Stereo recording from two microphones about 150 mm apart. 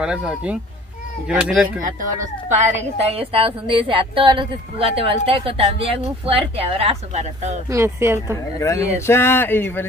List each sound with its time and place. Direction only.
0.0 s speech: 5° right (ahead or behind)
1.8 s speech: 60° right (ahead or behind)
3.2 s speech: 35° right (ahead or behind)
7.7 s speech: 15° right (ahead or behind)
8.5 s speech: 20° left (ahead or behind)